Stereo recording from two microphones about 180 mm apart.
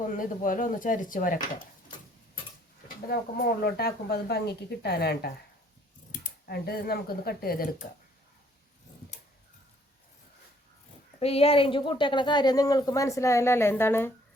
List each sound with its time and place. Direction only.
0.1 s speech: 50° left (ahead or behind)
3.1 s speech: 60° left (ahead or behind)
11.2 s speech: 35° left (ahead or behind); by 14.1 s 10° left (ahead or behind)